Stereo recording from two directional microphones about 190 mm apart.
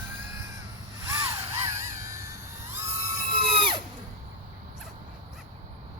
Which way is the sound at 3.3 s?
25° right (ahead or behind).